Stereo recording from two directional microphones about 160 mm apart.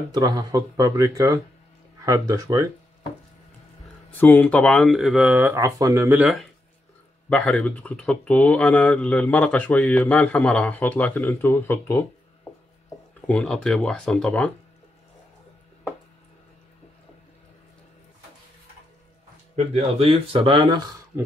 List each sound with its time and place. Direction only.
0.1 s speech: 25° right (ahead or behind)
4.2 s speech: 10° left (ahead or behind)
5.3 s speech: 20° right (ahead or behind)
7.2 s speech: 5° left (ahead or behind)
13.3 s speech: 5° left (ahead or behind)
19.5 s speech: 40° right (ahead or behind)